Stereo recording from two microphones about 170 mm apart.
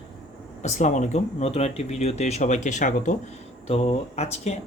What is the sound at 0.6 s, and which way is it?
Speech, 45° left (ahead or behind).